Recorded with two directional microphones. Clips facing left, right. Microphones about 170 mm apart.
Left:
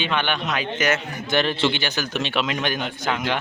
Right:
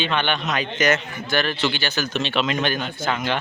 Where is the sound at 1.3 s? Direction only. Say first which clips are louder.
Left 2 dB; 25° left (ahead or behind).